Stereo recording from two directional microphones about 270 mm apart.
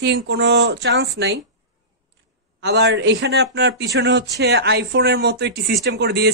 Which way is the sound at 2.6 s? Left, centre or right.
Right.